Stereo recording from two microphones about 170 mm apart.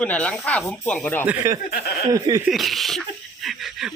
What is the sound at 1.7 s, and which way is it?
Speech, 65° left (ahead or behind).